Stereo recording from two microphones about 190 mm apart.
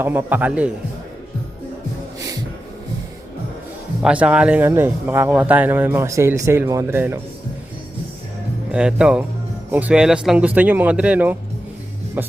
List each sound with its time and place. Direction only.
0.0 s speech: 10° right (ahead or behind)
4.0 s speech: 5° right (ahead or behind)
8.7 s speech: 5° right (ahead or behind)